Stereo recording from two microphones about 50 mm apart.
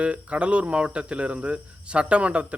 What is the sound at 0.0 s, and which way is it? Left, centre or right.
A man's voice, right.